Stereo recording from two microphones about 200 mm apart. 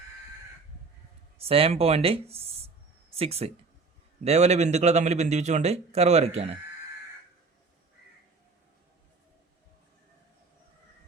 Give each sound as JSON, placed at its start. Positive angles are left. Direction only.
{"t": 1.4, "sound": "speech", "side_deg": -30}